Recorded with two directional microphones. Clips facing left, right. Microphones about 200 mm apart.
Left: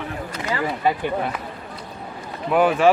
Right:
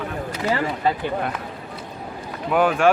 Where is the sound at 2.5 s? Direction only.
Centre (ahead or behind).